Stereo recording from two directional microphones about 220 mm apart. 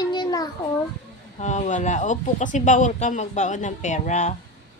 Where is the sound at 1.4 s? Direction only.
30° left (ahead or behind).